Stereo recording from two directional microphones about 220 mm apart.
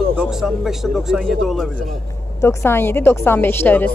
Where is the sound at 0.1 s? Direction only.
5° right (ahead or behind).